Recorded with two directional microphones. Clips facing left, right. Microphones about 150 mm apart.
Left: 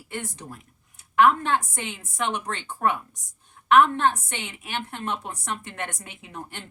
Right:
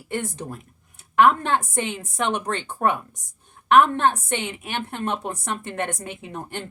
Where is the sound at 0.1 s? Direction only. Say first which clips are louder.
Right 6 dB; 50° right (ahead or behind).